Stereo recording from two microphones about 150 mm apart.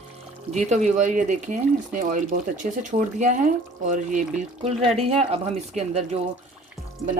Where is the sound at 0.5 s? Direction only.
50° right (ahead or behind).